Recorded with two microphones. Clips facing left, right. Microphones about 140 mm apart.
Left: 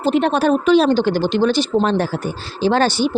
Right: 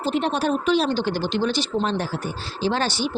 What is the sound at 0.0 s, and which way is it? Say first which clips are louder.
A woman's voice: left 7 dB; 65° left (ahead or behind).